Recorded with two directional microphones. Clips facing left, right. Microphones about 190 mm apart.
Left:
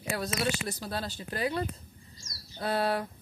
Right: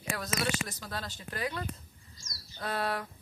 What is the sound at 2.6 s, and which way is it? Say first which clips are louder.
Speech: left 5 dB; 30° left (ahead or behind).